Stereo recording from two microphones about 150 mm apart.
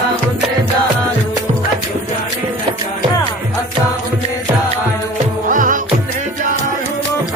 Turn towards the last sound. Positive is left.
turn(degrees=-60)  # may be behind; listen again after turning